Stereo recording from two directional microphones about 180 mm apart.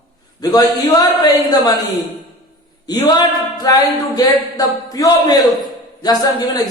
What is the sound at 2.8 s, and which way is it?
Speech, 20° left (ahead or behind).